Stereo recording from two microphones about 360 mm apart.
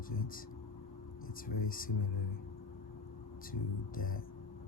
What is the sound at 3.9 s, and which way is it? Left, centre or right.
Speech, left.